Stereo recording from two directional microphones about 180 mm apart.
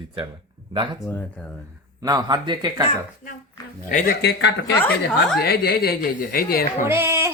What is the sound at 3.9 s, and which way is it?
Speech, 60° left (ahead or behind).